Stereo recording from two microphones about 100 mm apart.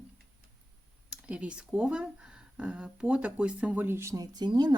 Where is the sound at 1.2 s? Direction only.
10° right (ahead or behind); by 4.2 s 30° right (ahead or behind).